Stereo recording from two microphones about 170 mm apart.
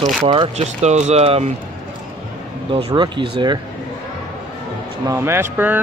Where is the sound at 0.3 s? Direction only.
35° right (ahead or behind).